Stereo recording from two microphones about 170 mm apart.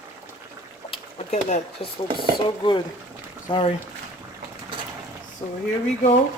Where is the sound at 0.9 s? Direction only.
40° left (ahead or behind).